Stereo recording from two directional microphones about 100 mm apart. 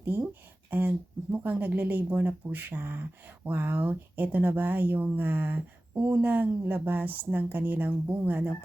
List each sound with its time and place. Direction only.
0.0 s speech: 20° right (ahead or behind)